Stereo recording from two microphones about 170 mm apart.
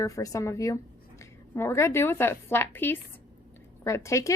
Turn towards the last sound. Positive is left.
turn(degrees=15)  # may be behind; listen again after turning